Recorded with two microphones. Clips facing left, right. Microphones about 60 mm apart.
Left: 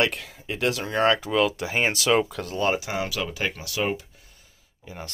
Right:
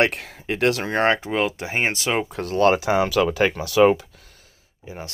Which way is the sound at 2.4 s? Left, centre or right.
Right.